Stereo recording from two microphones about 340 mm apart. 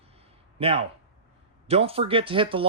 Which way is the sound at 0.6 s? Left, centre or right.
Centre.